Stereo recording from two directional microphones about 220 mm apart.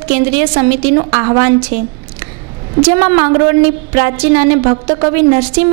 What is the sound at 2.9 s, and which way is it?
Speech, 20° right (ahead or behind).